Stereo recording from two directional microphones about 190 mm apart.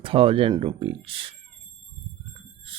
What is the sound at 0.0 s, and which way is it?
Speech, 30° right (ahead or behind).